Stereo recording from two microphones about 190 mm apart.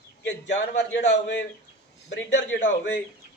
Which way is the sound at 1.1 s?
65° left (ahead or behind).